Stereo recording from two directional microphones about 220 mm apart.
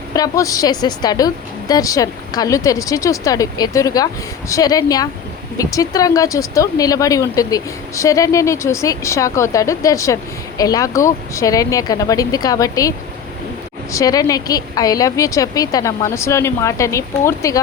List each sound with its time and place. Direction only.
0.1 s a woman's voice: 15° left (ahead or behind)
13.9 s a woman's voice: 15° left (ahead or behind)